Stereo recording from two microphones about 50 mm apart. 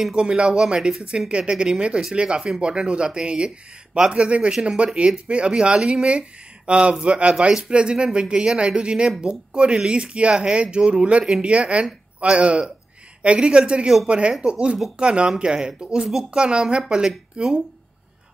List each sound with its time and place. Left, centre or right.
0.1 s speech: centre